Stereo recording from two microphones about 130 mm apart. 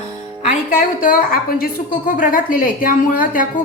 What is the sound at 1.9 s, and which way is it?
A woman's voice, 90° left.